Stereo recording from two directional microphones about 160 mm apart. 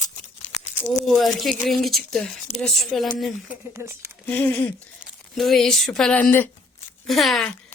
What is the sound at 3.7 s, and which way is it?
Speech, 15° right (ahead or behind).